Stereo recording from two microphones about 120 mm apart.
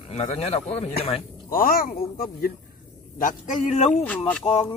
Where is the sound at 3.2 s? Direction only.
90° left.